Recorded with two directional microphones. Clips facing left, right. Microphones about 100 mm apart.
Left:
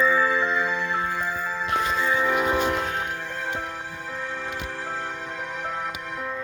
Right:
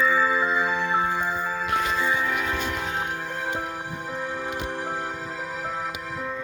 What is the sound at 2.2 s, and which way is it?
Music, 15° left (ahead or behind).